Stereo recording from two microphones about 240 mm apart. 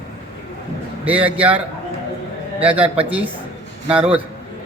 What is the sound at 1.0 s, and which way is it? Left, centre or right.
A man's voice, centre.